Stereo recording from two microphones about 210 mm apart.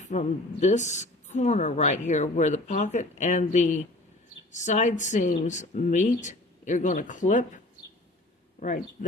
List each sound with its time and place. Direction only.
0.0 s a woman's voice: 35° left (ahead or behind)
8.6 s a woman's voice: 35° left (ahead or behind)